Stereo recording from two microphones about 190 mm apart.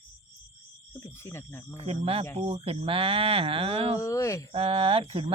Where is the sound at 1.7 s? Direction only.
30° right (ahead or behind).